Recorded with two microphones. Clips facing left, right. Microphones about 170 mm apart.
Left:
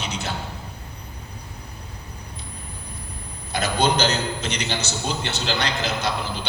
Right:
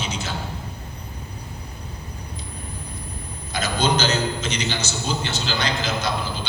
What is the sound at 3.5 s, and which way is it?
A man's voice, 65° left (ahead or behind).